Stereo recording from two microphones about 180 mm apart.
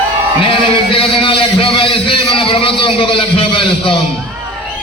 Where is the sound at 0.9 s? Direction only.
30° left (ahead or behind).